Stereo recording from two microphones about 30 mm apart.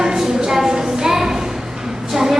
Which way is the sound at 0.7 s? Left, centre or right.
Centre.